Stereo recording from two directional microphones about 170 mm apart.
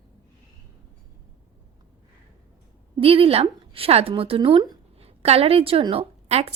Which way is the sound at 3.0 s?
35° right (ahead or behind).